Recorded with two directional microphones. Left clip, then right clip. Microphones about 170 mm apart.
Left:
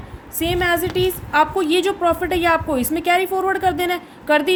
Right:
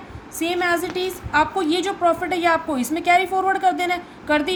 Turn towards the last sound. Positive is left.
turn(degrees=60)  # may be behind; listen again after turning